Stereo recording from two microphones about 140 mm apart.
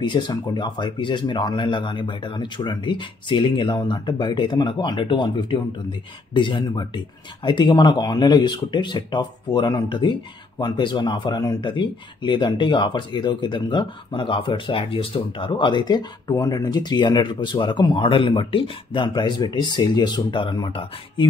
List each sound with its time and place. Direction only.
0.0 s speech: 35° left (ahead or behind)